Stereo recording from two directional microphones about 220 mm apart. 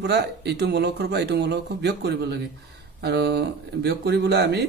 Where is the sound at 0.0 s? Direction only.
50° right (ahead or behind).